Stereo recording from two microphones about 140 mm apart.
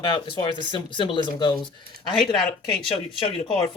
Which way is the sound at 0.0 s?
30° left (ahead or behind).